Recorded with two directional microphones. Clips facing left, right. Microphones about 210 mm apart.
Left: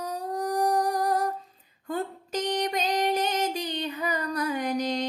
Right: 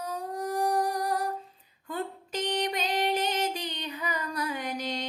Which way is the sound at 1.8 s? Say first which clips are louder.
Left 3 dB; 45° left (ahead or behind).